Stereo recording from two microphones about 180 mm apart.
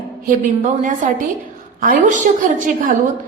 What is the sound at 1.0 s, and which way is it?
A woman's voice, 45° right (ahead or behind).